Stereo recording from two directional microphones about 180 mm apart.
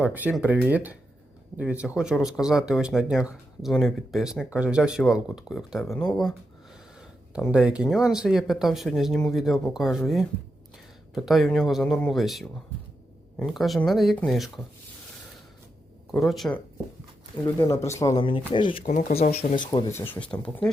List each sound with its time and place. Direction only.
0.0 s speech: 10° right (ahead or behind)
7.3 s speech: 5° right (ahead or behind)
16.1 s speech: centre (ahead or behind)
17.4 s speech: 15° left (ahead or behind)
18.8 s speech: 45° left (ahead or behind); by 19.8 s 25° left (ahead or behind)
19.9 s speech: 15° left (ahead or behind)